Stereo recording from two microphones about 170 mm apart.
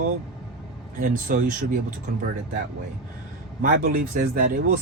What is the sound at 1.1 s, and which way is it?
Speech, 50° right (ahead or behind).